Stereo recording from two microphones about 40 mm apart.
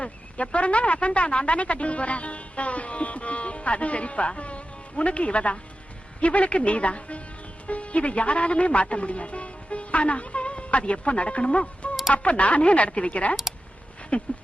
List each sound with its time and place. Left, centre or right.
0.0 s speech: left